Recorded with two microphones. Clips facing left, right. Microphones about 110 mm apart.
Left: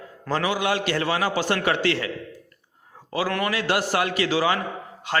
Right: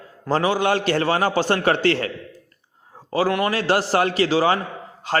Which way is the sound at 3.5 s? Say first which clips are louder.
Right 4 dB; 35° right (ahead or behind).